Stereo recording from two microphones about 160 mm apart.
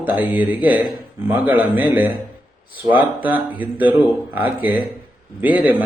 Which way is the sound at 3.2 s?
10° right (ahead or behind).